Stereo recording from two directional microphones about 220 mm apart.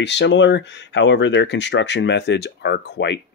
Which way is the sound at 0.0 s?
50° left (ahead or behind).